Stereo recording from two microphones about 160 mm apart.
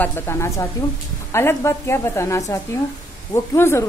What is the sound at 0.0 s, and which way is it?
Speech, 15° left (ahead or behind).